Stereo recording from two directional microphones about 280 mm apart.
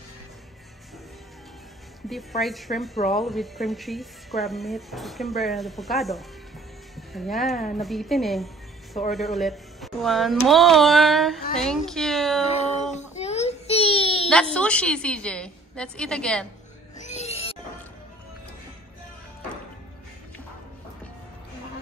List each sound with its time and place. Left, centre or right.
2.0 s speech: centre
12.4 s a sound: left
14.5 s speech: centre
17.0 s music: left